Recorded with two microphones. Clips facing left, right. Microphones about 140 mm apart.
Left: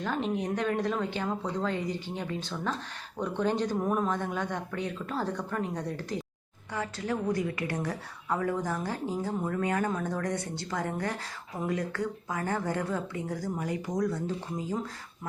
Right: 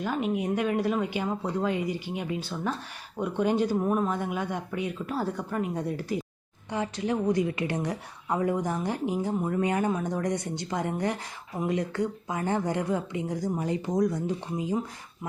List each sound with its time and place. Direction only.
0.0 s speech: 10° right (ahead or behind)
6.7 s a woman's voice: 20° right (ahead or behind)